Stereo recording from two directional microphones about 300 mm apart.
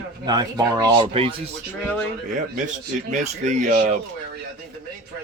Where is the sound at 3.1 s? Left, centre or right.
Right.